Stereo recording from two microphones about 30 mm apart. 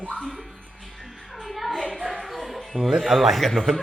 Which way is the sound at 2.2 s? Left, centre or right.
Centre.